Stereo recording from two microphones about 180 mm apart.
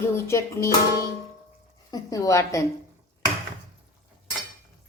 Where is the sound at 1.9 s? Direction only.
20° left (ahead or behind).